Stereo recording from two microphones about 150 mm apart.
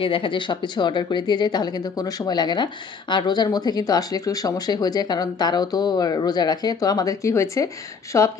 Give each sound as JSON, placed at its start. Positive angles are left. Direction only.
{"t": 0.0, "sound": "speech", "side_deg": 35}